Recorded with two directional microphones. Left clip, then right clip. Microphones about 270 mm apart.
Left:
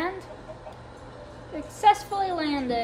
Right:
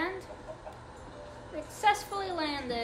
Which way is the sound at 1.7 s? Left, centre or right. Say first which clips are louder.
Left 7 dB; left.